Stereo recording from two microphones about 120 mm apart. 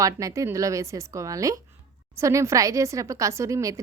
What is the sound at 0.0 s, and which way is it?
A woman's voice, 30° right (ahead or behind).